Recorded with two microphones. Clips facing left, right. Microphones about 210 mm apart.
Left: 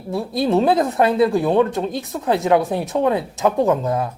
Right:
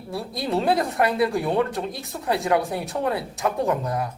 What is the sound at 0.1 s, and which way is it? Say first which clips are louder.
Speech: left 7 dB; 25° left (ahead or behind).